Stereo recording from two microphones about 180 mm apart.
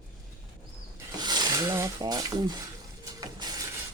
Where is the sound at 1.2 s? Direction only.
20° right (ahead or behind).